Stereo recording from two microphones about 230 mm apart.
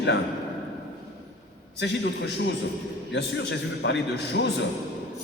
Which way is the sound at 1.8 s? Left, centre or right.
Left.